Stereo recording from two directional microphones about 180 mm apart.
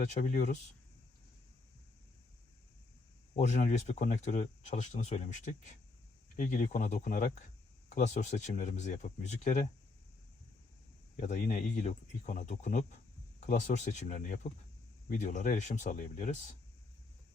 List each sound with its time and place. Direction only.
0.0 s speech: 45° left (ahead or behind)
3.3 s speech: 40° left (ahead or behind)
11.2 s speech: 45° left (ahead or behind)